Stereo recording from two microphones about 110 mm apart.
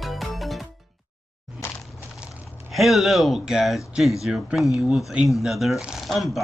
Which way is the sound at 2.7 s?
Centre (ahead or behind).